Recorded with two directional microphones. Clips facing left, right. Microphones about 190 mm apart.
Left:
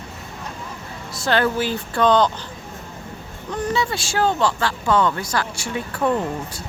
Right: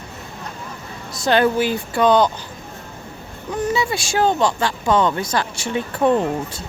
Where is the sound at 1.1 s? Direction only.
15° right (ahead or behind).